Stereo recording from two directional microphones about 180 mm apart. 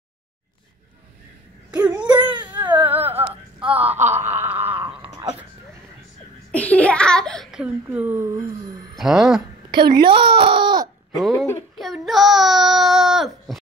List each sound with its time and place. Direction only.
1.7 s a sound: 10° right (ahead or behind)
2.0 s baby cry: 25° right (ahead or behind)
2.7 s whimper: 10° right (ahead or behind)
3.8 s wail: 10° right (ahead or behind)
6.5 s a sound: 10° left (ahead or behind); by 8.8 s 20° right (ahead or behind)
8.9 s speech: centre (ahead or behind)
9.9 s speech: 30° right (ahead or behind)
11.1 s speech: centre (ahead or behind)
11.7 s child singing: centre (ahead or behind)